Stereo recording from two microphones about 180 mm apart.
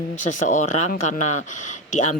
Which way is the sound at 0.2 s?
45° left (ahead or behind).